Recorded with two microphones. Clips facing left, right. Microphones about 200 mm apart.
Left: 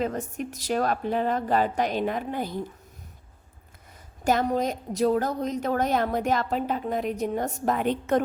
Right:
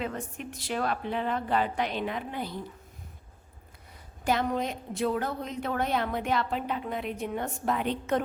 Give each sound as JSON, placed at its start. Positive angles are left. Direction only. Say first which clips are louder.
{"t": 0.0, "sound": "a woman's voice", "louder": "left 6 dB", "side_deg": 40}
{"t": 4.2, "sound": "a woman's voice", "louder": "left 4 dB", "side_deg": 45}